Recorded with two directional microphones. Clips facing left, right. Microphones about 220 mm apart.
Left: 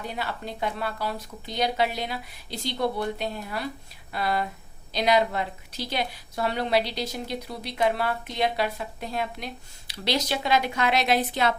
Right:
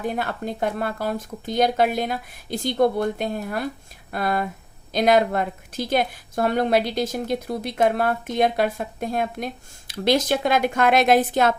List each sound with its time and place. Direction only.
0.0 s a woman's voice: 50° right (ahead or behind)